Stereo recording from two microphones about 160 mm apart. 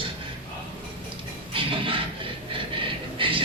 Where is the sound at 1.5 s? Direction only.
35° right (ahead or behind).